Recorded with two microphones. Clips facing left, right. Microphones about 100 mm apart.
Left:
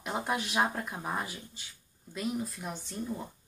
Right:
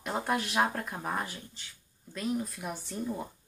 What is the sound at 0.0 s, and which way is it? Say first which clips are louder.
Speech: right 2 dB; 5° left (ahead or behind).